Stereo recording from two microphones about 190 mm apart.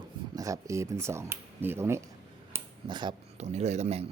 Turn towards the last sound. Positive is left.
turn(degrees=-35)  # may be behind; listen again after turning